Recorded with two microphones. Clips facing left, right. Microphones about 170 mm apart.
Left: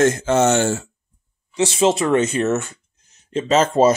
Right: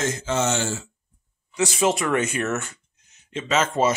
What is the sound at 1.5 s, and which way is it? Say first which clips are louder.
Speech: left 5 dB; 25° left (ahead or behind).